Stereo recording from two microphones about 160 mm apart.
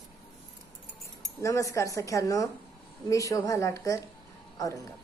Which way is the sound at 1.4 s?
20° left (ahead or behind).